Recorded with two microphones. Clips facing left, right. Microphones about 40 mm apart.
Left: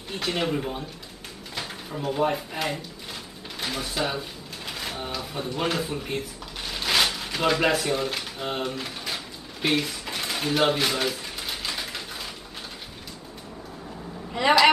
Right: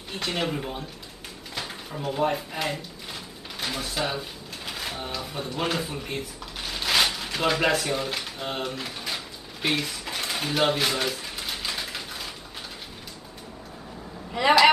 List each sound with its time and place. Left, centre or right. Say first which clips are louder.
0.1 s speech: left 2 dB; centre
1.5 s a sound: left 1 dB; centre
14.3 s a woman's voice: right 1 dB; centre